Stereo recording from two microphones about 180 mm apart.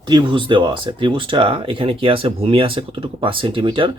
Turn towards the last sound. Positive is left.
turn(degrees=-25)  # may be behind; listen again after turning